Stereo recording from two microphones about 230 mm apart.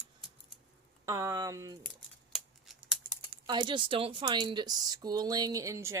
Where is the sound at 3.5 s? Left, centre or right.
Right.